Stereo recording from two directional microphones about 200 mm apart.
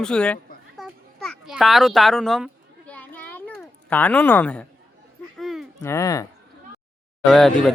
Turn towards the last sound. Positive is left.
turn(degrees=0)  # may be behind; listen again after turning